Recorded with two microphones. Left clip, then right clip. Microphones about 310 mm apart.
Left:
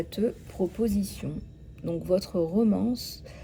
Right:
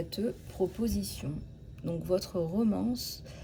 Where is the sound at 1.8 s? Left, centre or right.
Left.